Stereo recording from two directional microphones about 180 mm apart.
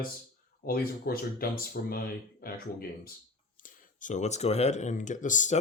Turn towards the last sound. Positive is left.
turn(degrees=45)  # may be behind; listen again after turning